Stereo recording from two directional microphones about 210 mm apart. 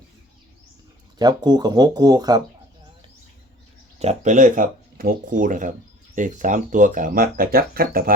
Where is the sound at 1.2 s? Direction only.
20° right (ahead or behind).